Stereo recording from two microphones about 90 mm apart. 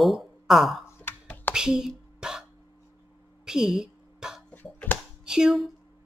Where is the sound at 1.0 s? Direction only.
20° left (ahead or behind).